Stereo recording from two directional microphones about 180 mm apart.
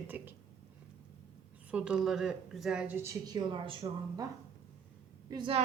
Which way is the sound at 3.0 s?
20° right (ahead or behind).